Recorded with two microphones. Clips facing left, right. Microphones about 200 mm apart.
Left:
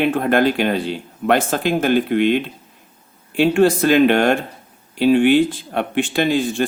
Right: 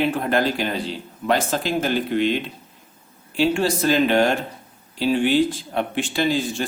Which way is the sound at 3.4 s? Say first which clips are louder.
Left 6 dB; 55° left (ahead or behind).